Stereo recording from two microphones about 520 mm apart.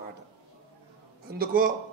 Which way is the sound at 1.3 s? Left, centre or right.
Centre.